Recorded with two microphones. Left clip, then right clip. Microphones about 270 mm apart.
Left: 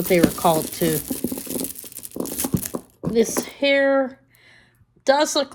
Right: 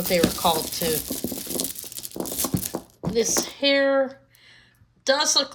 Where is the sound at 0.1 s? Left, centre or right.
Left.